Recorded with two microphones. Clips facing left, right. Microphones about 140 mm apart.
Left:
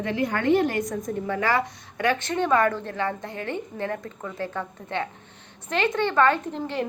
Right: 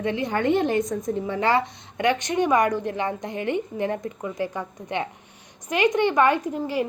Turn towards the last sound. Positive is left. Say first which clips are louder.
# right 3 dB
turn(degrees=-10)  # may be behind; listen again after turning